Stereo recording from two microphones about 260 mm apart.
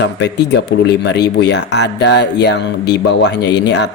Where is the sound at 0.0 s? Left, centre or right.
Left.